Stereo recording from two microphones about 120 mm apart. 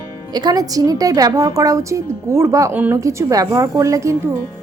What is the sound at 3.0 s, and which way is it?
Speech, 25° right (ahead or behind).